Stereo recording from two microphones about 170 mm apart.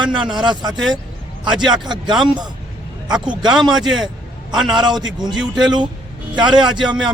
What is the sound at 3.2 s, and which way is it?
Speech, 25° right (ahead or behind).